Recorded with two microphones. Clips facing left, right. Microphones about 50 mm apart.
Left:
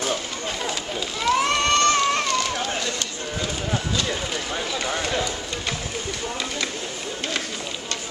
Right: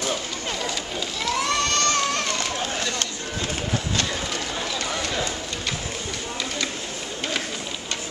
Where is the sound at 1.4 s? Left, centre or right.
Left.